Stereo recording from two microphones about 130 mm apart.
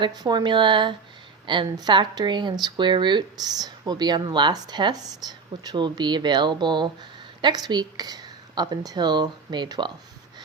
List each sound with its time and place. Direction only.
0.0 s speech: 30° right (ahead or behind)